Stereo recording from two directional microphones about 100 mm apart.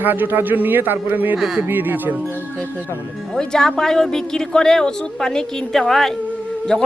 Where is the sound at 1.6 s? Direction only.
20° right (ahead or behind).